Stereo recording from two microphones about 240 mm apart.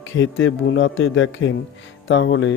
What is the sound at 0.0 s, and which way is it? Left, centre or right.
Speech, left.